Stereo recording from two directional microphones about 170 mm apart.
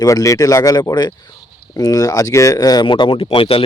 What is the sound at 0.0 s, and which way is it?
Speech, 20° left (ahead or behind).